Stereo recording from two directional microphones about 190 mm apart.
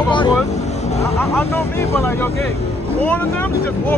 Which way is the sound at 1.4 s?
10° left (ahead or behind).